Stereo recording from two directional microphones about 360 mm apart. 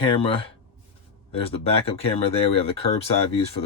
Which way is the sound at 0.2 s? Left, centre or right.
Centre.